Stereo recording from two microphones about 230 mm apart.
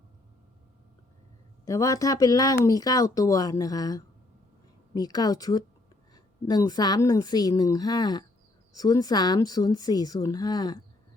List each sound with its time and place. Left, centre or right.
1.6 s speech: centre